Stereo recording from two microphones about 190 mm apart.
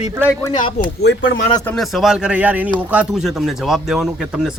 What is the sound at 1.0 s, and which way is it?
Speech, 70° left (ahead or behind).